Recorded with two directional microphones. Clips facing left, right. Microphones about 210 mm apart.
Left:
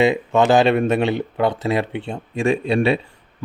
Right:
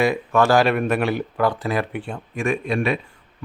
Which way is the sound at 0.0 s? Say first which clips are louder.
Left 2 dB; 20° left (ahead or behind).